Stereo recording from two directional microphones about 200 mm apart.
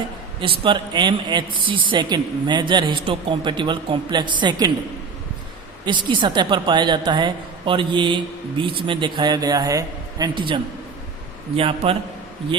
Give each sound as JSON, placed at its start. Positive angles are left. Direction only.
{"t": 0.6, "sound": "a woman's voice", "side_deg": -25}
{"t": 5.8, "sound": "a woman's voice", "side_deg": -25}